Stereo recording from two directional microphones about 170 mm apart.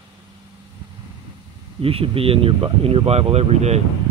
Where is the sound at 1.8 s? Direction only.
35° right (ahead or behind).